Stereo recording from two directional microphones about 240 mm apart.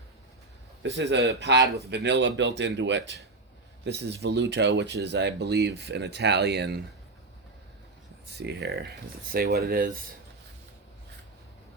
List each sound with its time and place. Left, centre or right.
0.8 s speech: right
1.6 s speech: centre
1.9 s speech: right
8.3 s speech: right